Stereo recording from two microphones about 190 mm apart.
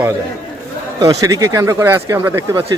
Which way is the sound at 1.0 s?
20° right (ahead or behind).